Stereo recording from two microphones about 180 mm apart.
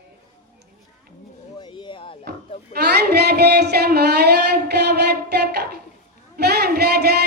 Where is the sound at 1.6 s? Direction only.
25° left (ahead or behind).